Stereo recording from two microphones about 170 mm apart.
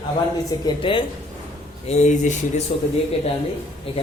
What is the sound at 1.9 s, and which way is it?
Speech, 45° left (ahead or behind).